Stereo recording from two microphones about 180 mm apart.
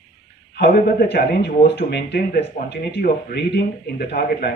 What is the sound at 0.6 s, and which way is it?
Speech, 60° left (ahead or behind).